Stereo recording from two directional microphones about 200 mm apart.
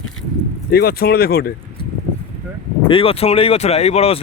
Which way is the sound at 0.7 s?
50° left (ahead or behind).